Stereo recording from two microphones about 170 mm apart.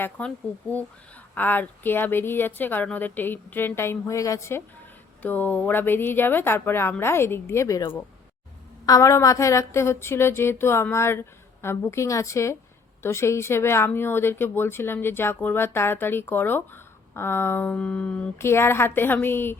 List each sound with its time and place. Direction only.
0.0 s speech: 10° left (ahead or behind)